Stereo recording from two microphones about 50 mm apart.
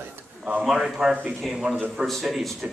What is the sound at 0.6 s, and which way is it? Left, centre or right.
Speech, centre.